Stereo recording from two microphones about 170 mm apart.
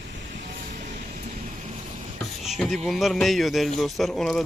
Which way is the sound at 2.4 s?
Centre (ahead or behind).